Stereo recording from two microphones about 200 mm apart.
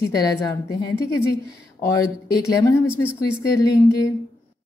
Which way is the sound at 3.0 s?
10° left (ahead or behind).